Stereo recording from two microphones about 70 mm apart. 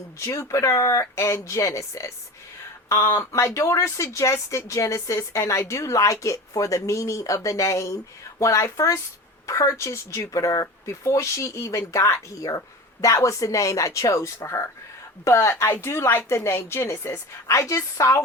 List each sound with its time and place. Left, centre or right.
0.3 s speech: left
3.3 s speech: left